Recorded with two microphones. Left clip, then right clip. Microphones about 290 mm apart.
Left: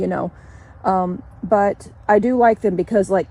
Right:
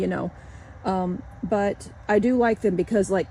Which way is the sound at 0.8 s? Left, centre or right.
Left.